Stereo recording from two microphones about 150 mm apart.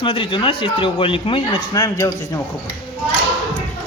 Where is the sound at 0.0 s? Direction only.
35° left (ahead or behind).